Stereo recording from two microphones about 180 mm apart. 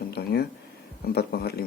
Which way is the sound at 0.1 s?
60° left (ahead or behind).